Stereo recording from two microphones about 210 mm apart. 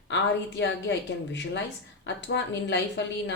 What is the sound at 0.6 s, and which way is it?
Speech, 60° left (ahead or behind).